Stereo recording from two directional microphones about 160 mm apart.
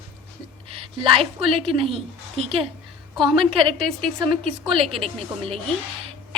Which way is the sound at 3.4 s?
Centre (ahead or behind).